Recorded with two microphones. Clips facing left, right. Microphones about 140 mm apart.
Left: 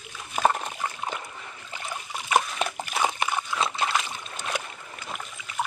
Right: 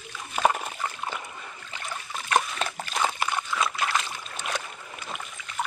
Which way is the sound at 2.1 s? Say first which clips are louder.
Left 1 dB; 10° left (ahead or behind).